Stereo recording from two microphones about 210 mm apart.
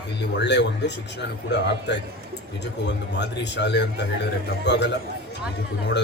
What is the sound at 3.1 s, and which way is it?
A man's voice, 55° left (ahead or behind).